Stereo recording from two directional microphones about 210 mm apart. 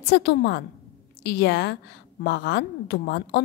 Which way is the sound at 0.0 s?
50° left (ahead or behind).